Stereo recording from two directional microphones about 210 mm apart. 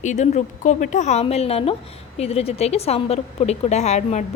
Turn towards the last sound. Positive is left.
turn(degrees=35)  # may be behind; listen again after turning